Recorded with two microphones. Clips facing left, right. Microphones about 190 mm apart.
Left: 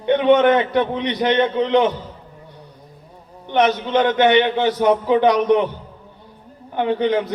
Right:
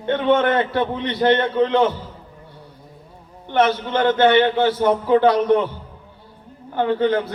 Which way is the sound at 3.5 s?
20° left (ahead or behind).